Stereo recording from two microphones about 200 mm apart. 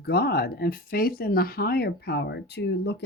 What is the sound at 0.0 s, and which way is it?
Speech, 50° left (ahead or behind).